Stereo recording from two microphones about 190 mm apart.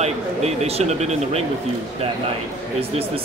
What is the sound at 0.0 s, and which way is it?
Speech, 35° right (ahead or behind).